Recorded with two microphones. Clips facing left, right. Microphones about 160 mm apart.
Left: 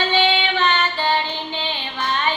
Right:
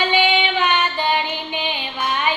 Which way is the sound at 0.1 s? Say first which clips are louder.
Right 1 dB; 15° right (ahead or behind).